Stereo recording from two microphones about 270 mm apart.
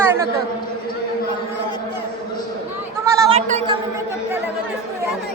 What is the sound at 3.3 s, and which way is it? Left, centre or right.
Speech, right.